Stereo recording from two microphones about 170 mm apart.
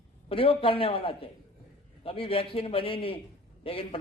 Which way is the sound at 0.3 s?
30° left (ahead or behind).